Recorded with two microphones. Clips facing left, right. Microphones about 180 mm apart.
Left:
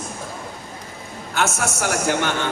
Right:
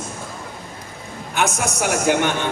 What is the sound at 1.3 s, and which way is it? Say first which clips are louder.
A man's voice: right 1 dB; 15° right (ahead or behind).